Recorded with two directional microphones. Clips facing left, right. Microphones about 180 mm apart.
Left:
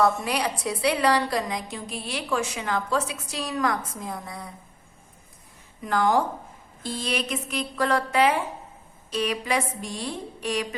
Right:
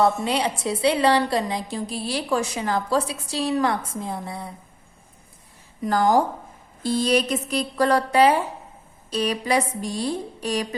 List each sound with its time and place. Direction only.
0.0 s a woman's voice: 25° right (ahead or behind)
5.8 s a woman's voice: 35° right (ahead or behind)